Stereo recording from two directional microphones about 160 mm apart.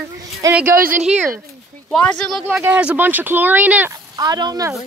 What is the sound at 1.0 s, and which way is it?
Speech, 5° right (ahead or behind).